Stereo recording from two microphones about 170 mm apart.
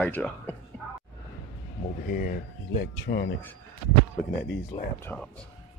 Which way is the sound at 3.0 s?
85° left.